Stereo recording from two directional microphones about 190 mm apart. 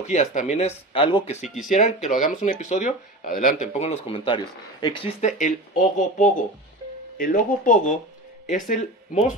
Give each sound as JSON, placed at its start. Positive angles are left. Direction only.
{"t": 0.0, "sound": "speech", "side_deg": 40}
{"t": 5.9, "sound": "speech", "side_deg": 40}